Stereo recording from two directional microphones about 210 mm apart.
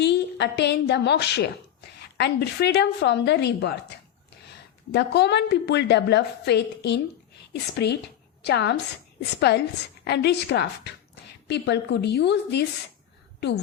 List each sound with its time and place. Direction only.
0.0 s a woman's voice: 55° left (ahead or behind)
4.9 s a woman's voice: 50° left (ahead or behind)